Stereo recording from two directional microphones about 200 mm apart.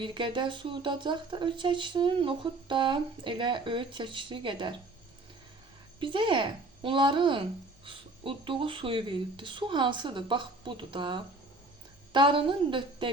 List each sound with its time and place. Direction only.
0.0 s speech: 25° right (ahead or behind)
6.0 s speech: 25° right (ahead or behind)